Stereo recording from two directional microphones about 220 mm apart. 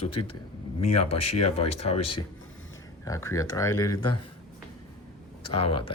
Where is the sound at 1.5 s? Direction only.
30° left (ahead or behind).